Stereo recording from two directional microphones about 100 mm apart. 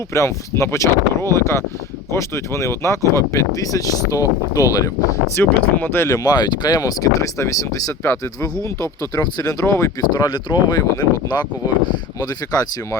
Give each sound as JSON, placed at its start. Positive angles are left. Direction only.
{"t": 0.1, "sound": "speech", "side_deg": 30}
{"t": 5.3, "sound": "speech", "side_deg": 15}
{"t": 6.1, "sound": "speech", "side_deg": 40}
{"t": 10.1, "sound": "speech", "side_deg": 45}